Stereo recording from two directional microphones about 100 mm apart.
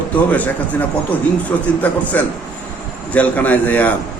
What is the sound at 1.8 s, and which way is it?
Speech, 15° left (ahead or behind).